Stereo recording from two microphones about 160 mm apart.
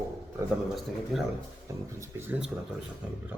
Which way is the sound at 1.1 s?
Centre (ahead or behind).